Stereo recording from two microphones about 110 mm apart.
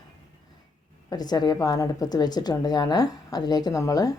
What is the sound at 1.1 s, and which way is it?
A woman's voice, 35° left (ahead or behind).